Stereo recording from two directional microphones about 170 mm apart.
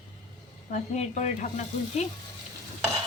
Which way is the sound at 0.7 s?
45° left (ahead or behind).